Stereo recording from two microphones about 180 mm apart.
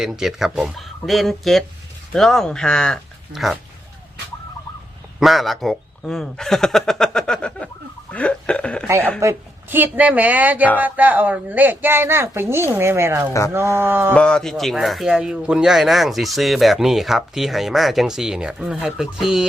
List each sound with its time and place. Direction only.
0.0 s speech: centre (ahead or behind)
5.2 s a man's voice: centre (ahead or behind)
8.1 s a sound: 5° left (ahead or behind)
9.2 s speech: 10° right (ahead or behind)
14.1 s speech: 5° left (ahead or behind)